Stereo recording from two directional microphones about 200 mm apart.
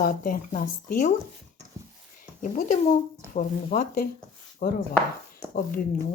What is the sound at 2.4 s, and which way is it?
A woman's voice, 40° left (ahead or behind).